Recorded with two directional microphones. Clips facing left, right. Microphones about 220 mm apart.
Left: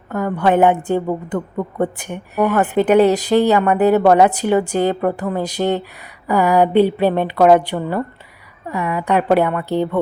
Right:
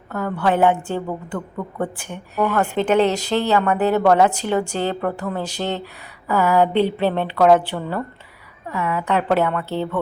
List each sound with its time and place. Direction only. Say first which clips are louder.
0.1 s a woman's voice: left 4 dB; 15° left (ahead or behind)